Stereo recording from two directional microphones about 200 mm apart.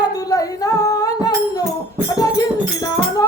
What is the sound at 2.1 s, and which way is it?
Music, 20° left (ahead or behind).